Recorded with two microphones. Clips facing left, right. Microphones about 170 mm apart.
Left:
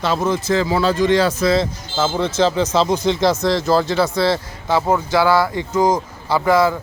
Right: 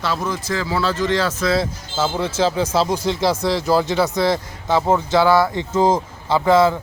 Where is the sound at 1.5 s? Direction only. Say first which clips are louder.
Left 3 dB; 10° right (ahead or behind).